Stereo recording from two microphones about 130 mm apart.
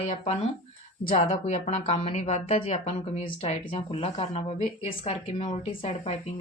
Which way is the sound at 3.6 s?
40° left (ahead or behind).